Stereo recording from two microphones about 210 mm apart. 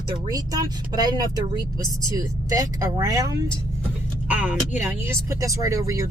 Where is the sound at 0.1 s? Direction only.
20° right (ahead or behind).